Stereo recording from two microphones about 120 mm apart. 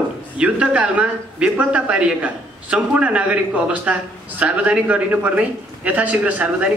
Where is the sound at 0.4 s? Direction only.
10° right (ahead or behind).